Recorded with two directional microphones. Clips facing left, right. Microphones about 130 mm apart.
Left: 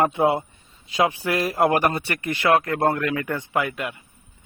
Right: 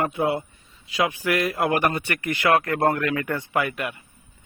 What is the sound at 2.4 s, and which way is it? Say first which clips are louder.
A man's voice: left 1 dB; 25° left (ahead or behind).